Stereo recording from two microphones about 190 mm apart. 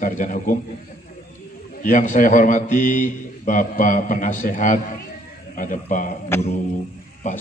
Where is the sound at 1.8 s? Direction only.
40° left (ahead or behind).